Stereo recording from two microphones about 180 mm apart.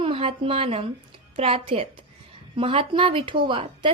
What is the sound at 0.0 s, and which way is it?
A woman's voice, 30° right (ahead or behind).